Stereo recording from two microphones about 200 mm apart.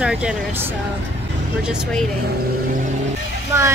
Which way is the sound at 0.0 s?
5° right (ahead or behind).